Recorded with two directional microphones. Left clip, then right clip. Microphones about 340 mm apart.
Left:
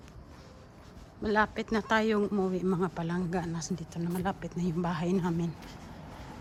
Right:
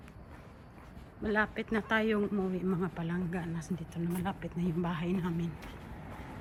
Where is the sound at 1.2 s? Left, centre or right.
Centre.